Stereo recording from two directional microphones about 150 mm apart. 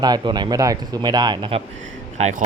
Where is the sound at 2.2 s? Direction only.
50° right (ahead or behind).